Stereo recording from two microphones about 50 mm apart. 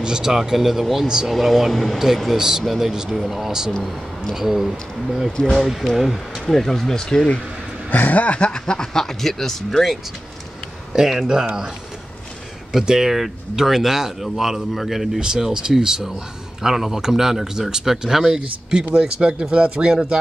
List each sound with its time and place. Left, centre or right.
0.0 s speech: centre
1.3 s speech: centre
2.3 s speech: centre
2.6 s speech: centre
2.9 s speech: centre
5.3 s speech: centre
5.7 s speech: centre
7.9 s speech: left; by 9.9 s centre
10.9 s speech: centre
12.7 s speech: centre
15.1 s speech: centre